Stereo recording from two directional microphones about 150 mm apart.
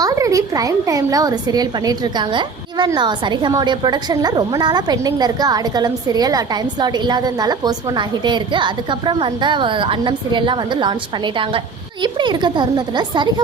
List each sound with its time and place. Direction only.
0.0 s a woman's voice: 20° right (ahead or behind)
12.0 s speech: 30° right (ahead or behind)